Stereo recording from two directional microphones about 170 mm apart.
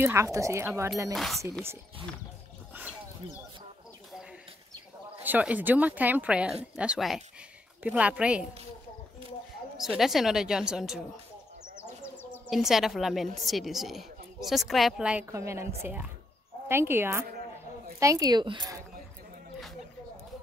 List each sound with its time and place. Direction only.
0.0 s speech: 15° right (ahead or behind)
1.1 s a woman's voice: centre (ahead or behind)
5.2 s a woman's voice: 10° right (ahead or behind)
9.8 s a woman's voice: centre (ahead or behind)
11.8 s bird: 15° left (ahead or behind)
12.4 s a woman's voice: centre (ahead or behind)
15.3 s speech: 15° right (ahead or behind)